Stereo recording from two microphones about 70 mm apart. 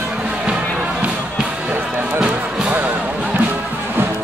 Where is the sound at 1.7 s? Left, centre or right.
Centre.